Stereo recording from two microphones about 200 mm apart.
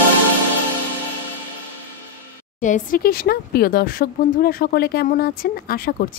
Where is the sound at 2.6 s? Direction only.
40° left (ahead or behind).